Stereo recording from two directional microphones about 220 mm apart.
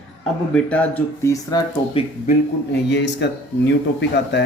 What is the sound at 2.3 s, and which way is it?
Speech, 50° left (ahead or behind).